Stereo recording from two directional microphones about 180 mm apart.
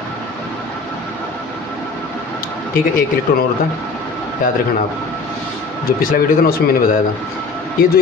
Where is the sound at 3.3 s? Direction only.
55° left (ahead or behind).